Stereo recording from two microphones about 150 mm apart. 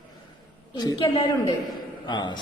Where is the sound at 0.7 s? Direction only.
25° left (ahead or behind).